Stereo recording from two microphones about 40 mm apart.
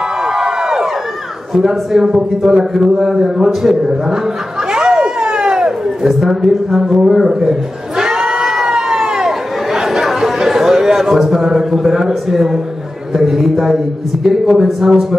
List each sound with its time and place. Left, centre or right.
0.2 s crowd: centre
1.5 s a man's voice: centre
4.7 s children playing: centre
5.2 s a sound: centre
6.0 s a woman's voice: centre
8.0 s crowd: centre
9.8 s a woman's voice: centre